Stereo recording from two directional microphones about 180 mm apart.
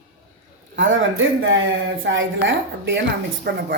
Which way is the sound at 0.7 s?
90° right.